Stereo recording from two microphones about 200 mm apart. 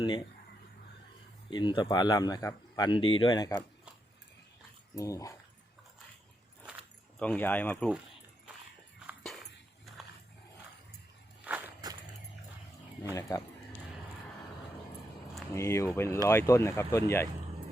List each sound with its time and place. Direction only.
1.5 s speech: 25° left (ahead or behind)
4.9 s speech: 15° left (ahead or behind)
7.2 s speech: 5° left (ahead or behind)
9.0 s dog: centre (ahead or behind)
11.8 s a sound: 20° right (ahead or behind)
13.1 s speech: 15° left (ahead or behind)
15.5 s speech: 15° left (ahead or behind)